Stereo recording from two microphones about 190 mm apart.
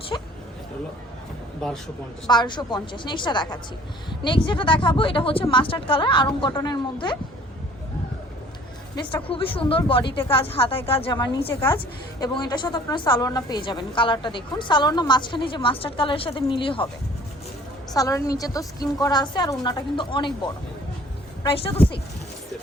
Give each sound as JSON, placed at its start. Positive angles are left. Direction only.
{"t": 0.1, "sound": "speech", "side_deg": 20}
{"t": 2.2, "sound": "a woman's voice", "side_deg": 25}
{"t": 9.0, "sound": "a woman's voice", "side_deg": 25}
{"t": 17.9, "sound": "a woman's voice", "side_deg": 20}
{"t": 21.4, "sound": "a woman's voice", "side_deg": 30}